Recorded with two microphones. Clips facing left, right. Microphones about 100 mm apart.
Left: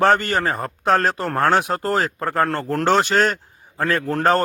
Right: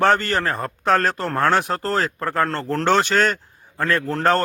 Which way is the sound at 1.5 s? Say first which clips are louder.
Left 2 dB; 5° left (ahead or behind).